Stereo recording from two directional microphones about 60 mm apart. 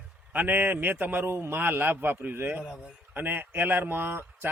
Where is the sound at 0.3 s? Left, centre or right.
Right.